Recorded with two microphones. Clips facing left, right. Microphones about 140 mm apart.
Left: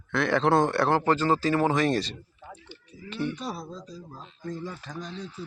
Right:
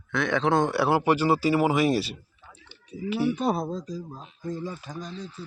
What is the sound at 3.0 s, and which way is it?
Speech, 65° right (ahead or behind).